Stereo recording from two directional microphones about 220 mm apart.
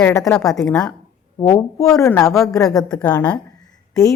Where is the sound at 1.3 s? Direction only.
15° left (ahead or behind).